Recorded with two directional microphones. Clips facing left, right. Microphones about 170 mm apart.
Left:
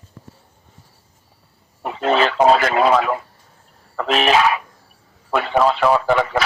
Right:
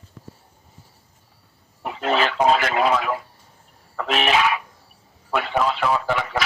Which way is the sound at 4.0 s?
40° left (ahead or behind).